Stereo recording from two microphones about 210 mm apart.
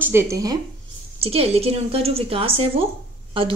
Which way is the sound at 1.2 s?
30° right (ahead or behind).